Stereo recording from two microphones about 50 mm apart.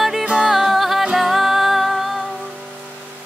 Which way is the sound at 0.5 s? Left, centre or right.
Centre.